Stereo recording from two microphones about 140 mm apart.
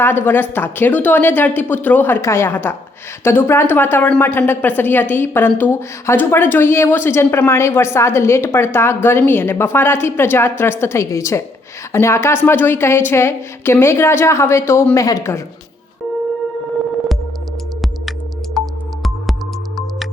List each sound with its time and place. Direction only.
0.0 s a woman's voice: 15° left (ahead or behind)
18.5 s music: centre (ahead or behind)